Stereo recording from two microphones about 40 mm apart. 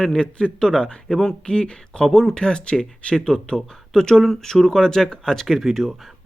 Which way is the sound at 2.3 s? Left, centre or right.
Left.